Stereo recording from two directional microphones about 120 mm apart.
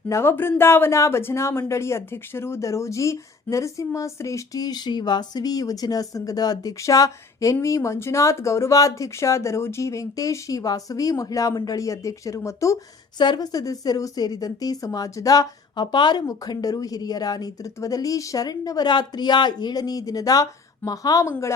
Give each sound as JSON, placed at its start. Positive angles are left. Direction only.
{"t": 0.1, "sound": "speech", "side_deg": 20}
{"t": 13.1, "sound": "a woman's voice", "side_deg": 40}